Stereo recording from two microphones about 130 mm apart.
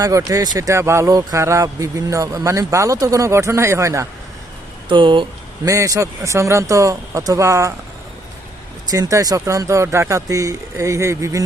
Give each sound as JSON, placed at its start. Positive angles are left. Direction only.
{"t": 0.2, "sound": "speech", "side_deg": -25}
{"t": 4.9, "sound": "speech", "side_deg": -40}
{"t": 5.6, "sound": "speech", "side_deg": -25}
{"t": 8.9, "sound": "speech", "side_deg": -25}